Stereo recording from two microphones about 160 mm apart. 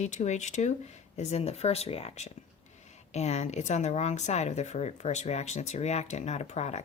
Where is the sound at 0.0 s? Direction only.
45° left (ahead or behind).